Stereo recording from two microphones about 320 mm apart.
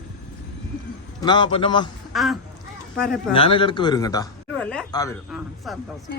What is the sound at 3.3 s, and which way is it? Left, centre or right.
Speech, centre.